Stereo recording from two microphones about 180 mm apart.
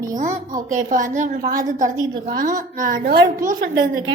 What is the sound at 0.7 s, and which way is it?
A woman's voice, 45° right (ahead or behind).